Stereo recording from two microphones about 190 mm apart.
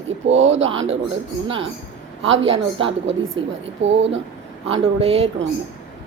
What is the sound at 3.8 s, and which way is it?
Speech, 75° right (ahead or behind).